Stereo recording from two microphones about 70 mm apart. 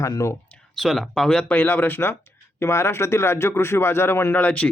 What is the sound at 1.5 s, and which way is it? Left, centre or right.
A man's voice, left.